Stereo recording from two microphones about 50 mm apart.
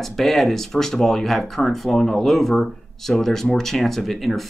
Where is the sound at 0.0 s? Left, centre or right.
Centre.